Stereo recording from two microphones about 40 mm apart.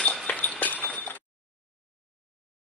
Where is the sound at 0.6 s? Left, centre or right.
Left.